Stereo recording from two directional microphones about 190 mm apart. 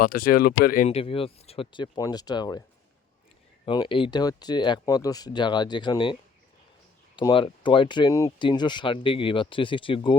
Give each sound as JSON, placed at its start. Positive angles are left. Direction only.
{"t": 0.0, "sound": "speech", "side_deg": 50}
{"t": 0.9, "sound": "speech", "side_deg": 30}
{"t": 3.7, "sound": "speech", "side_deg": 25}
{"t": 7.2, "sound": "speech", "side_deg": 25}